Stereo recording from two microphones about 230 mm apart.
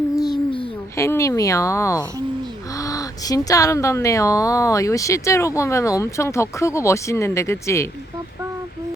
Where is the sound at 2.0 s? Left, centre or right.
Centre.